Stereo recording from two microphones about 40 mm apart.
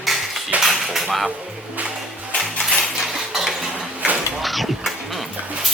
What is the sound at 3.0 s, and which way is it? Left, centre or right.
Cutlery, centre.